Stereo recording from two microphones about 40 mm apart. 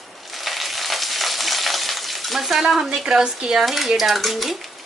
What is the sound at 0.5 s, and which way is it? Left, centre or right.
Frying, centre.